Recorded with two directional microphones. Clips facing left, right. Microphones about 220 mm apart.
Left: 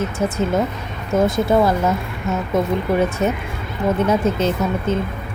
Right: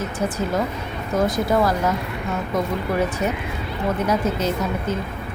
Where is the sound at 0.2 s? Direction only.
25° left (ahead or behind).